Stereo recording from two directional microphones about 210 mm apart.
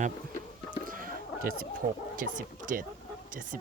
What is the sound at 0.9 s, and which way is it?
Chicken, 40° right (ahead or behind).